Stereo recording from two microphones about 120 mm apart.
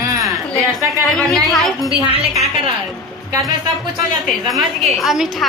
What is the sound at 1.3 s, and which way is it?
Speech, centre (ahead or behind).